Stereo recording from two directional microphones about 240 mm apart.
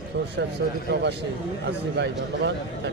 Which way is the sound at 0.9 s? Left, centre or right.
Right.